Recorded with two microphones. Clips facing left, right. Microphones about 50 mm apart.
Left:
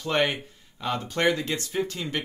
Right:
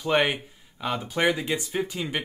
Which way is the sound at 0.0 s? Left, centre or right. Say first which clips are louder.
Right 2 dB; centre.